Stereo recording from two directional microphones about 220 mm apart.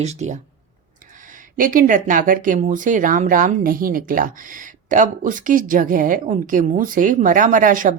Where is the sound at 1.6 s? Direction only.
40° right (ahead or behind).